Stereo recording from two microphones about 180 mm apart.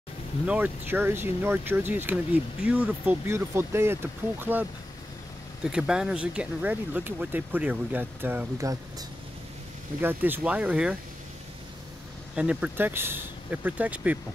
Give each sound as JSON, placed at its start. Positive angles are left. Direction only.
{"t": 0.5, "sound": "speech", "side_deg": -10}
{"t": 10.0, "sound": "speech", "side_deg": -10}
{"t": 12.4, "sound": "speech", "side_deg": -5}